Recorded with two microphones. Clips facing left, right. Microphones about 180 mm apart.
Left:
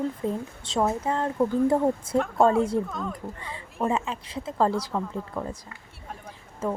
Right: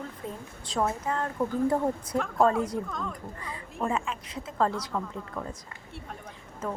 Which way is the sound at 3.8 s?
25° left (ahead or behind).